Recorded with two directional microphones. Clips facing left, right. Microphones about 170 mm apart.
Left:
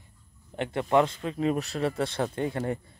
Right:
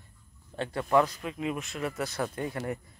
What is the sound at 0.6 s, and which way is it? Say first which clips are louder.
Speech: left 2 dB; 25° left (ahead or behind).